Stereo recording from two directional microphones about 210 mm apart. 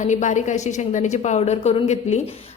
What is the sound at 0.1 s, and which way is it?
Speech, 35° left (ahead or behind).